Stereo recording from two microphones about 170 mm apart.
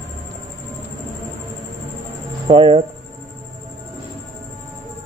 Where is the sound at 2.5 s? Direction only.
30° right (ahead or behind).